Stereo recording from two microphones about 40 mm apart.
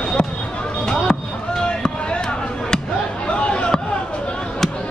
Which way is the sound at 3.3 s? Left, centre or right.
Left.